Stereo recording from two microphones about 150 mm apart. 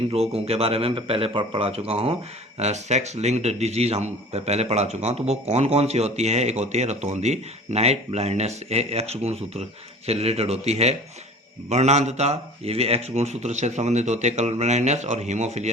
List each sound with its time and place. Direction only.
0.1 s a man's voice: 45° right (ahead or behind)